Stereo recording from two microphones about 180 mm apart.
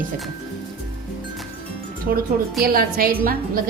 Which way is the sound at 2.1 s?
55° right (ahead or behind).